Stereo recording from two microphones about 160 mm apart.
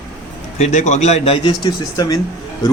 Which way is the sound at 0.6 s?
45° left (ahead or behind).